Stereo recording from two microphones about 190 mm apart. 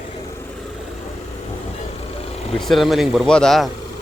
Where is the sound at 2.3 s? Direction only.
30° left (ahead or behind).